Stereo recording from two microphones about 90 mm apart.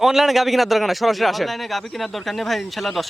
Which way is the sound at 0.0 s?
5° right (ahead or behind).